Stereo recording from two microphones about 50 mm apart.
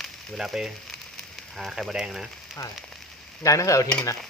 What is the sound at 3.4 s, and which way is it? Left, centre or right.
Frying, left.